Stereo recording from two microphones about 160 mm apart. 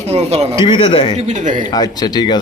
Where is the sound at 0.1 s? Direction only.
40° right (ahead or behind).